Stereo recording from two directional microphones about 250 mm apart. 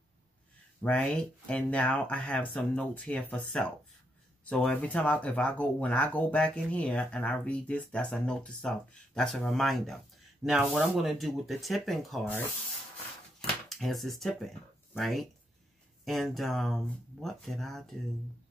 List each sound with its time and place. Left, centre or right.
0.8 s speech: centre
13.7 s speech: centre